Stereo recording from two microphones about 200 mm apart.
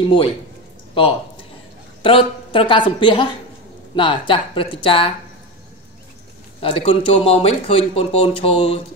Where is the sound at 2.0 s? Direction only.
25° left (ahead or behind).